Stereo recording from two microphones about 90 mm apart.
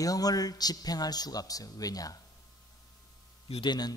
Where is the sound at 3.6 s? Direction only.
50° left (ahead or behind).